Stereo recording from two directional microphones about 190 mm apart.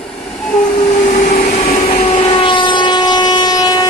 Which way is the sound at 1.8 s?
35° left (ahead or behind).